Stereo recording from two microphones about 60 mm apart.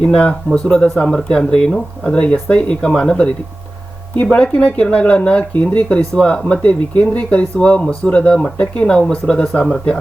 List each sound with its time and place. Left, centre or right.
0.0 s speech: centre
4.1 s speech: left
4.4 s speech: centre